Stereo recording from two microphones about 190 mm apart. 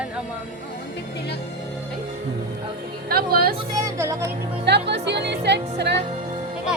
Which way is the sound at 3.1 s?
50° right (ahead or behind).